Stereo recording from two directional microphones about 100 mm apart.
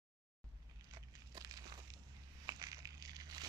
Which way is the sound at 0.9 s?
40° right (ahead or behind).